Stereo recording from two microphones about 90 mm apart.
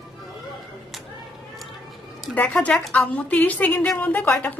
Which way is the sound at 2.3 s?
15° left (ahead or behind).